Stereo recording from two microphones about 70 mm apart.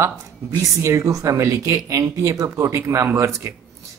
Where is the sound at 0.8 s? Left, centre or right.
Right.